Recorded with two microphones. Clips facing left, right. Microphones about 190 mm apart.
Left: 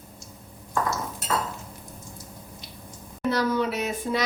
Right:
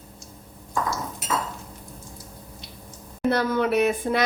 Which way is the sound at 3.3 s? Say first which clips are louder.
Right 2 dB; 55° right (ahead or behind).